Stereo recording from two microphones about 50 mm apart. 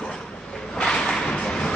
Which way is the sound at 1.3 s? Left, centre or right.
Left.